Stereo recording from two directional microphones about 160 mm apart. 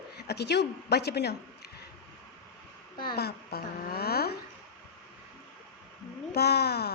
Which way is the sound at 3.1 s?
80° left.